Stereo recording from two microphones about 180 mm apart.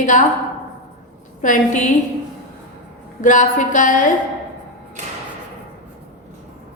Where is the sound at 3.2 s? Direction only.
45° left (ahead or behind).